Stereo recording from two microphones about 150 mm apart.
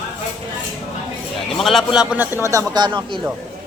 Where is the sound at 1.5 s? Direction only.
Centre (ahead or behind); by 2.6 s 20° right (ahead or behind).